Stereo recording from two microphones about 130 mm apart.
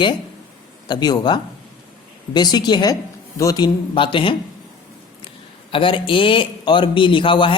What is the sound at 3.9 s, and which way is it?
Speech, 40° left (ahead or behind).